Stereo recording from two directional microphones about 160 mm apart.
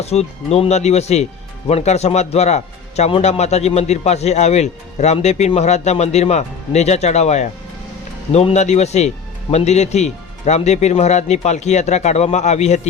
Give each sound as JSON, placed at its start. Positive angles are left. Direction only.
{"t": 0.0, "sound": "a man's voice", "side_deg": 40}